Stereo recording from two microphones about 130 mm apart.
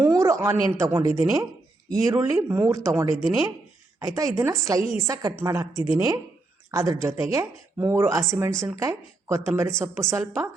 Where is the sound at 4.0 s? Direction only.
25° right (ahead or behind).